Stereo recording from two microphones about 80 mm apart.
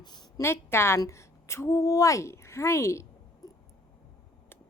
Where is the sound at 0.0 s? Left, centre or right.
Left.